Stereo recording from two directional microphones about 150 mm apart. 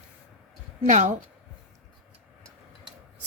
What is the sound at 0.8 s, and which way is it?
Speech, 55° right (ahead or behind).